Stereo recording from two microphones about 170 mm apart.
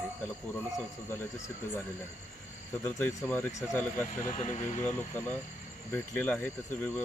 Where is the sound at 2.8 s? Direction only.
15° left (ahead or behind).